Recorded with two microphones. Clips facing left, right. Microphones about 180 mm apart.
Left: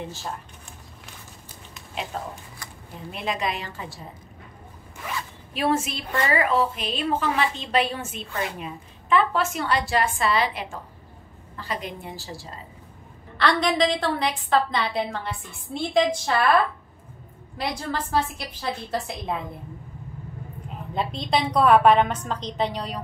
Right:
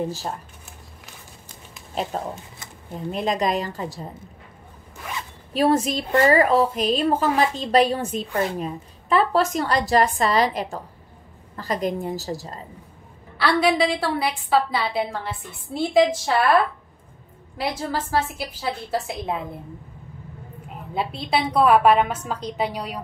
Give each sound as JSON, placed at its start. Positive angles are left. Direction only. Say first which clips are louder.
{"t": 0.0, "sound": "a woman's voice", "louder": "right 7 dB", "side_deg": -35}
{"t": 3.1, "sound": "a woman's voice", "louder": "right 6 dB", "side_deg": -40}
{"t": 5.5, "sound": "a woman's voice", "louder": "right 5 dB", "side_deg": -40}
{"t": 13.4, "sound": "a woman's voice", "louder": "right 2 dB", "side_deg": -10}
{"t": 17.6, "sound": "a woman's voice", "louder": "right 2 dB", "side_deg": -5}
{"t": 20.9, "sound": "a woman's voice", "louder": "right 1 dB", "side_deg": -5}